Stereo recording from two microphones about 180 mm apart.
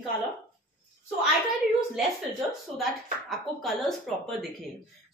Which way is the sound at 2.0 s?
Centre (ahead or behind).